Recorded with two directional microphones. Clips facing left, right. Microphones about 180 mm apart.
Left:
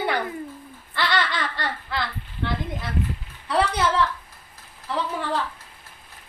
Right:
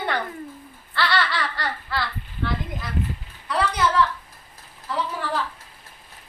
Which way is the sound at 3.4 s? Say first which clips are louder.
Left 1 dB; 30° left (ahead or behind).